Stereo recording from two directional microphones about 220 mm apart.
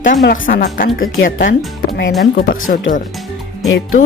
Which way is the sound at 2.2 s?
40° left (ahead or behind).